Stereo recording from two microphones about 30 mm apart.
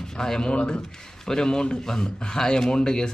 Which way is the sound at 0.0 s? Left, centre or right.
Left.